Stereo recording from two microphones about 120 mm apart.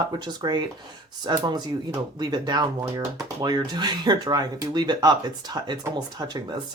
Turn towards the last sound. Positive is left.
turn(degrees=-35)  # may be behind; listen again after turning